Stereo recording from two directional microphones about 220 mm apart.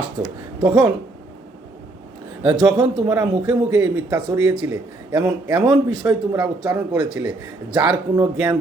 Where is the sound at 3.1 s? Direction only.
5° right (ahead or behind).